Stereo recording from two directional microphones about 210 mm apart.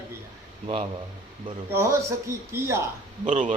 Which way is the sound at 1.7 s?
15° right (ahead or behind).